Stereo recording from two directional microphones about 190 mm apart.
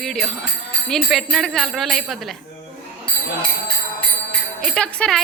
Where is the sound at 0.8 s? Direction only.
Centre (ahead or behind).